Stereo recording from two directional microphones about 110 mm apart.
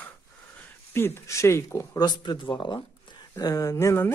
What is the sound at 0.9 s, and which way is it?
Speech, 25° left (ahead or behind).